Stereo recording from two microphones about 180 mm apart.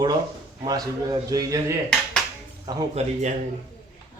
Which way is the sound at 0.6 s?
25° right (ahead or behind).